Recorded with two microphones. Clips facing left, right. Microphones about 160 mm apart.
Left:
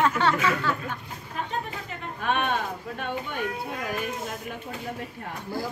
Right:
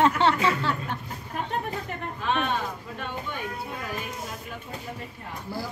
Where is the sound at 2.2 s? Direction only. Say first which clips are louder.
Left 1 dB; 55° left (ahead or behind).